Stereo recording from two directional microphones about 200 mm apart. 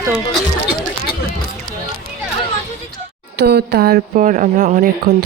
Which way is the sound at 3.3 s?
55° right (ahead or behind).